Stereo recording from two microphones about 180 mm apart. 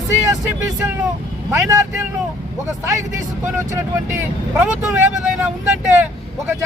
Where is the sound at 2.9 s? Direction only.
20° right (ahead or behind).